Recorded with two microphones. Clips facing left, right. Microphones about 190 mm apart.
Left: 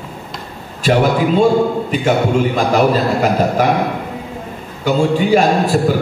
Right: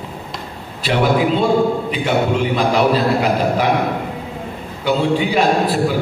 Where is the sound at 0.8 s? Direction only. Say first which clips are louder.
Left 2 dB; 45° left (ahead or behind).